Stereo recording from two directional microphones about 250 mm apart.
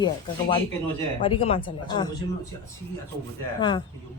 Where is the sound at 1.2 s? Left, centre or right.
Left.